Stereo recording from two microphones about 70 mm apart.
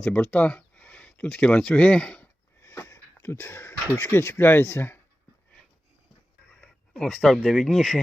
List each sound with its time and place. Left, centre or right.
0.0 s a sound: centre
1.3 s speech: centre
2.6 s sniff: left
4.1 s speech: left
6.6 s speech: centre